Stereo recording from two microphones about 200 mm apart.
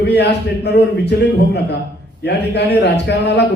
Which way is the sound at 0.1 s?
60° left (ahead or behind).